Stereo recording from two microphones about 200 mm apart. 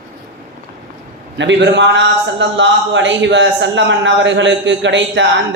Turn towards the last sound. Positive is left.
turn(degrees=-65)  # may be behind; listen again after turning